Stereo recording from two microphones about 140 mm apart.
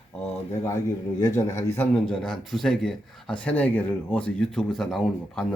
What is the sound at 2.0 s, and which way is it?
Speech, 5° left (ahead or behind).